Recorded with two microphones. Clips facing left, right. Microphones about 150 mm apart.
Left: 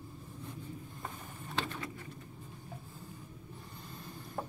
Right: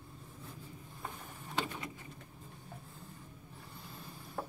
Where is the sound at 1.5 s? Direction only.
15° right (ahead or behind).